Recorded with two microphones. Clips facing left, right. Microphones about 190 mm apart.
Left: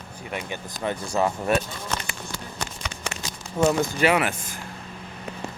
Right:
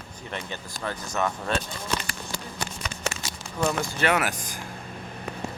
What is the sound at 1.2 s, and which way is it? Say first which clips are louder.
Speech: left 4 dB; 30° left (ahead or behind).